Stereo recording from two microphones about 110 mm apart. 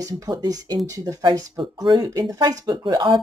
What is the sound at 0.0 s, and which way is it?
Speech, 35° right (ahead or behind).